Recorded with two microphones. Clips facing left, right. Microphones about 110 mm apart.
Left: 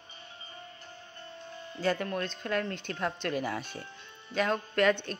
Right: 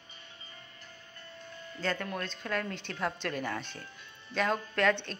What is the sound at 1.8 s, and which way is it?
Speech, 10° left (ahead or behind).